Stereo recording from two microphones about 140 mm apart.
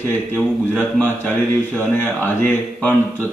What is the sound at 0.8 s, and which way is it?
Speech, 15° left (ahead or behind).